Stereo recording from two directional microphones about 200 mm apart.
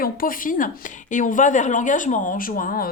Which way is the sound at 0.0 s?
45° left (ahead or behind).